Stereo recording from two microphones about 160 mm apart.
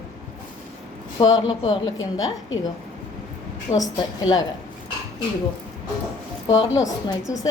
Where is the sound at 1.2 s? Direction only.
25° left (ahead or behind).